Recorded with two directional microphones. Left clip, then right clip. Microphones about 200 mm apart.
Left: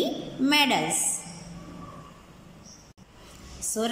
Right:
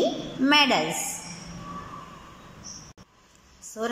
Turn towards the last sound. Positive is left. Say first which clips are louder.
# left 9 dB
turn(degrees=-5)  # may be behind; listen again after turning